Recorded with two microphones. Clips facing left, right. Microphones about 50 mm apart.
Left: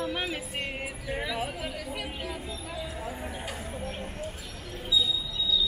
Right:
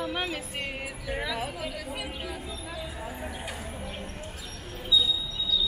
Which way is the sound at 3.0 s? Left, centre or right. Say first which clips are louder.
Even; centre.